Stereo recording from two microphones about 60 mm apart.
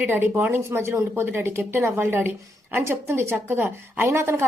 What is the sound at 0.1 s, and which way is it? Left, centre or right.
A woman's voice, right.